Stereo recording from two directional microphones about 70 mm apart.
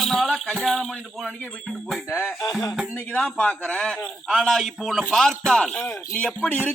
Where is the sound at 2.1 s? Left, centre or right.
Left.